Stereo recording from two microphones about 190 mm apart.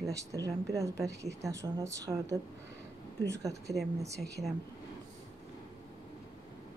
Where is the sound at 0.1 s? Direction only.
15° right (ahead or behind).